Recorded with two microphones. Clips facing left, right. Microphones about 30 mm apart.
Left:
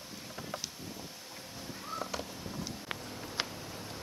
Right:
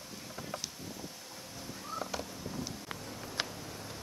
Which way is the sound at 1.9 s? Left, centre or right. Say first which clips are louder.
Even; centre.